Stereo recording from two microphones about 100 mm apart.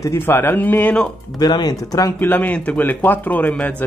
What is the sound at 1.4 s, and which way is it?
Speech, 45° left (ahead or behind).